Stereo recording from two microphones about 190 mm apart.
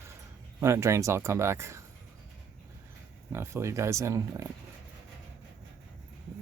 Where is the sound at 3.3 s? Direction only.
15° right (ahead or behind).